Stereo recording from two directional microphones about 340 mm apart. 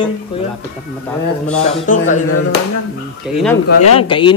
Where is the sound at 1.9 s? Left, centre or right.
Left.